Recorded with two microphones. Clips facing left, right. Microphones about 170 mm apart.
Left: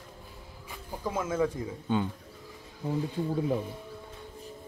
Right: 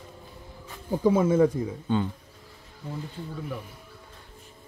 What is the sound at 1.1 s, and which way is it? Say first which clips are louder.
Speech: right 9 dB; 60° right (ahead or behind).